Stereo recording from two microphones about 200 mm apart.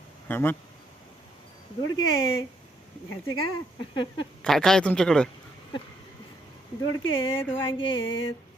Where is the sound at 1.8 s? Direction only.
20° left (ahead or behind).